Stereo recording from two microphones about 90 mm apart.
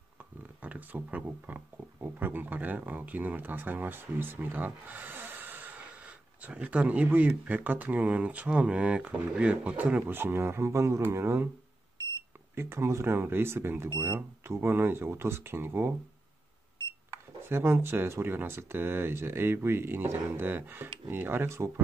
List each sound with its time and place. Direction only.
0.6 s speech: 20° right (ahead or behind)
12.5 s speech: 25° right (ahead or behind)
17.4 s speech: 25° right (ahead or behind)